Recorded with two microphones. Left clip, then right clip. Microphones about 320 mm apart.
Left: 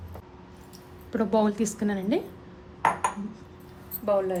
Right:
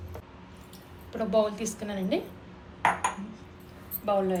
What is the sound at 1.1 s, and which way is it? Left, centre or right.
A woman's voice, left.